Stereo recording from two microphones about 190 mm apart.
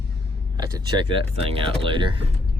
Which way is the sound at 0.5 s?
25° right (ahead or behind).